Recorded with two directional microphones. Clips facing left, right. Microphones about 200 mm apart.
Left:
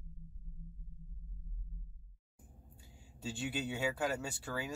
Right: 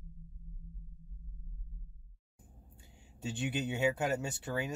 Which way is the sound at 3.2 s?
20° right (ahead or behind).